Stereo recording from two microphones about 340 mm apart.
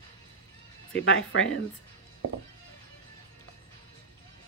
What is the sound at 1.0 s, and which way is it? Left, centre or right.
Speech, left.